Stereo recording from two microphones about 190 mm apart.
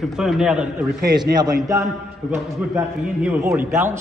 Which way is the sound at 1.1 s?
20° right (ahead or behind).